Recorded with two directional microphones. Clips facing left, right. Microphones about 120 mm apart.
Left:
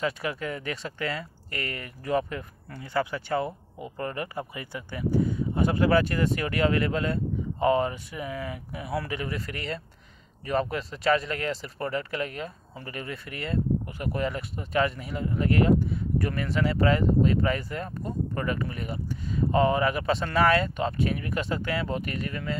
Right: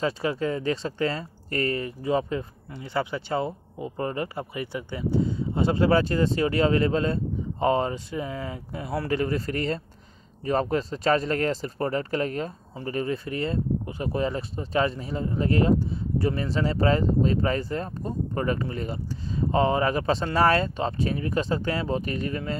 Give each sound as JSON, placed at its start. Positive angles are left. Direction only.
{"t": 0.0, "sound": "speech", "side_deg": -30}